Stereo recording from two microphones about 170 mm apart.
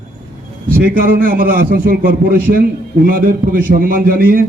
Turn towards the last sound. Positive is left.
turn(degrees=-55)  # may be behind; listen again after turning